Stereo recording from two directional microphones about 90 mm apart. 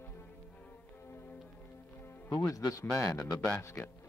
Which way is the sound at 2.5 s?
40° left (ahead or behind).